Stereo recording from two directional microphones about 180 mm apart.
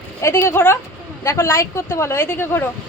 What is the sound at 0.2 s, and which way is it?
Speech, 15° left (ahead or behind).